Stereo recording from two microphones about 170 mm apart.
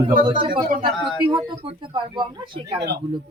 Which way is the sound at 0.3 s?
30° right (ahead or behind).